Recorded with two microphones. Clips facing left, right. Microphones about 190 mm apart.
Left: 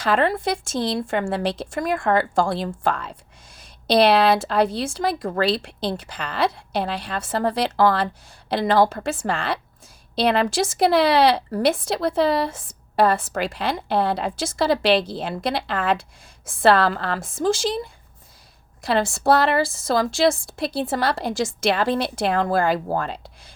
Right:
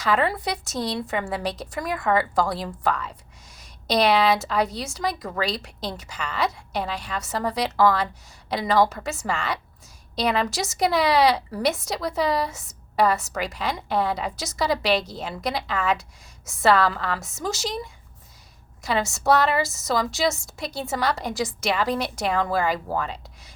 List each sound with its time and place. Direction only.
0.3 s a woman's voice: 25° left (ahead or behind)
18.8 s a woman's voice: 30° left (ahead or behind)